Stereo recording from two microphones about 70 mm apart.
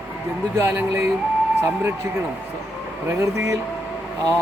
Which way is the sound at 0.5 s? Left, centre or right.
Right.